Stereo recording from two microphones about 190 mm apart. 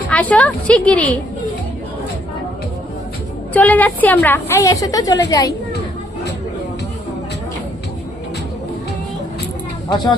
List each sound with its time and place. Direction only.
0.1 s a woman's voice: 5° left (ahead or behind)
3.5 s a woman's voice: 10° left (ahead or behind)
9.9 s a woman's voice: 20° left (ahead or behind)